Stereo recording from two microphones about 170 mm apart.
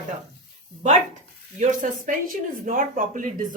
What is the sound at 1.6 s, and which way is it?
Speech, 45° right (ahead or behind).